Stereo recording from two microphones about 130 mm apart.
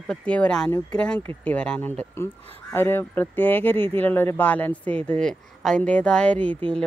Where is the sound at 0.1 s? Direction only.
10° left (ahead or behind).